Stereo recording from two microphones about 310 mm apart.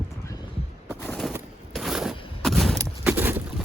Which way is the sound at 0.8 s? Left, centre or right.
Centre.